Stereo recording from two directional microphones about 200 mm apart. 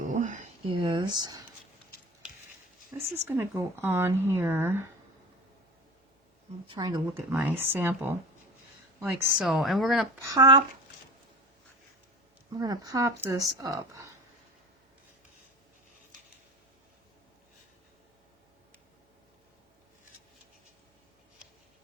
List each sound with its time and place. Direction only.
0.1 s a sound: 40° right (ahead or behind)
0.7 s speech: 25° right (ahead or behind)
2.9 s speech: 10° right (ahead or behind)
6.7 s speech: 20° right (ahead or behind)
9.3 s speech: centre (ahead or behind)
10.2 s speech: 15° right (ahead or behind)
12.5 s speech: 20° right (ahead or behind)